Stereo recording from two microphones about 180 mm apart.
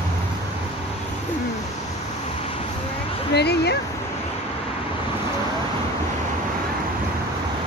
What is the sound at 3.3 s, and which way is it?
Speech, 65° left (ahead or behind).